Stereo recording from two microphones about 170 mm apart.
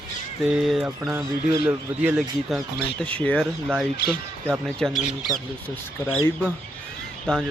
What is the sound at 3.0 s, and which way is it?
Speech, 10° left (ahead or behind).